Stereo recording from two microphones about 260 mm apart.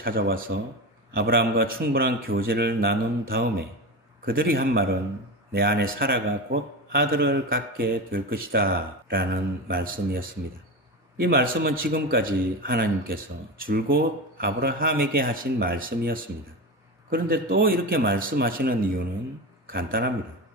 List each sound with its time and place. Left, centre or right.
0.0 s a man's voice: right
17.6 s a man's voice: right